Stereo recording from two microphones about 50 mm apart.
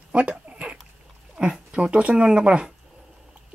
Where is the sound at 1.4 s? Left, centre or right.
Right.